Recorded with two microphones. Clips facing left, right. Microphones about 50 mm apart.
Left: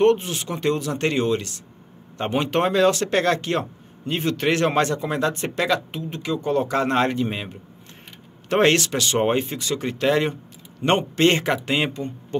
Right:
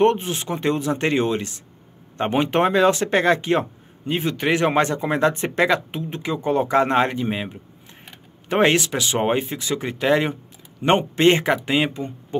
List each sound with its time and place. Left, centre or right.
0.0 s speech: right; by 11.9 s centre
11.9 s speech: centre